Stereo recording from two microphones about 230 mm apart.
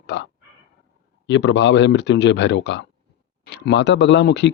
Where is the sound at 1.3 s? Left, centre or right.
Left.